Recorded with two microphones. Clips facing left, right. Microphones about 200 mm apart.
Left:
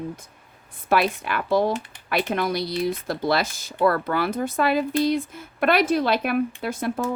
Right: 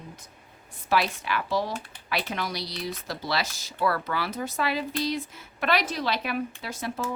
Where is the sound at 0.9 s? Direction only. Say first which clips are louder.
Left 4 dB; 55° left (ahead or behind).